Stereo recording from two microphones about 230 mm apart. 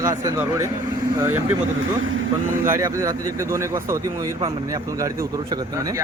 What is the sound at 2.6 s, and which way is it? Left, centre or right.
Speech, centre.